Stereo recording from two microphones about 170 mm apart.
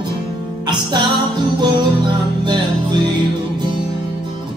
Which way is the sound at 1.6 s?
25° right (ahead or behind).